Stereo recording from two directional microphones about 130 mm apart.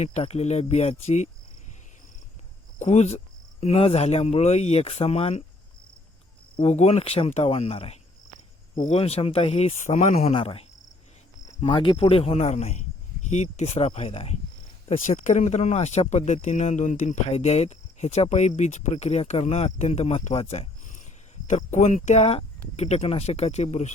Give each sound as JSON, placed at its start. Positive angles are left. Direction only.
{"t": 0.0, "sound": "speech", "side_deg": 55}
{"t": 2.7, "sound": "speech", "side_deg": 65}
{"t": 3.6, "sound": "speech", "side_deg": 50}
{"t": 6.6, "sound": "speech", "side_deg": 55}
{"t": 11.7, "sound": "speech", "side_deg": 45}
{"t": 14.8, "sound": "speech", "side_deg": 70}
{"t": 21.4, "sound": "speech", "side_deg": 65}